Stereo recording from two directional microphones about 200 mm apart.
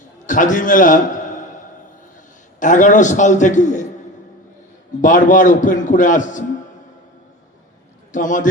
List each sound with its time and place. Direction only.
0.3 s a man's voice: 40° left (ahead or behind)
2.6 s a man's voice: 40° left (ahead or behind)
4.9 s a man's voice: 40° left (ahead or behind)
8.1 s a man's voice: 40° left (ahead or behind)